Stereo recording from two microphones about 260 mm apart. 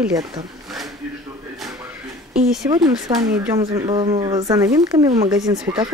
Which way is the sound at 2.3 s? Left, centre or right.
Centre.